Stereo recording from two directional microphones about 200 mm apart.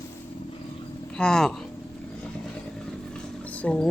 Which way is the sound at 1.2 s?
5° left (ahead or behind).